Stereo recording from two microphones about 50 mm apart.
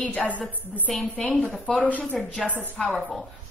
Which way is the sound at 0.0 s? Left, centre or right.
Left.